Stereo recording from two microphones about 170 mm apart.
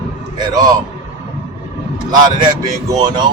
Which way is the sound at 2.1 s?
25° right (ahead or behind).